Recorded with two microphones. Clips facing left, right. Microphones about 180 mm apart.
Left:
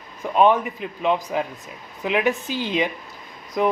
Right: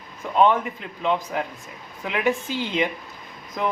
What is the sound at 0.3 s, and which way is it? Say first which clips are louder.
Speech: left 2 dB; 15° left (ahead or behind).